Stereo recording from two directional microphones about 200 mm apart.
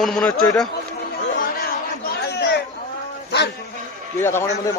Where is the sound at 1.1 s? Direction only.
50° left (ahead or behind).